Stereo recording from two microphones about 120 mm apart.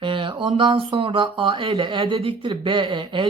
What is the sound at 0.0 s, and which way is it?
Speech, 45° right (ahead or behind).